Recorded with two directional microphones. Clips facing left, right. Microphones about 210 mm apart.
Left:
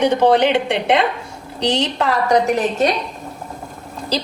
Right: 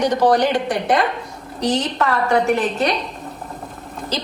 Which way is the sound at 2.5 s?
40° left (ahead or behind).